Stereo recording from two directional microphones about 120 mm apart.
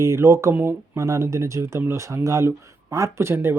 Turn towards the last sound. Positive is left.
turn(degrees=-20)  # may be behind; listen again after turning